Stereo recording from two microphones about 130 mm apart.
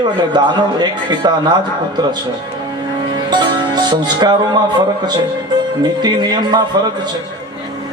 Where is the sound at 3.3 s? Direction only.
35° right (ahead or behind).